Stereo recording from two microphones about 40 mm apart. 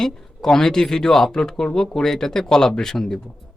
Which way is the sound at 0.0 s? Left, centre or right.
Centre.